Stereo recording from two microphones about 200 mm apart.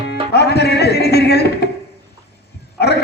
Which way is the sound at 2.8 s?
55° left (ahead or behind).